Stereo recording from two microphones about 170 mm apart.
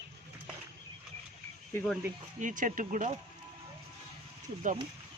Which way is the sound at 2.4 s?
50° right (ahead or behind).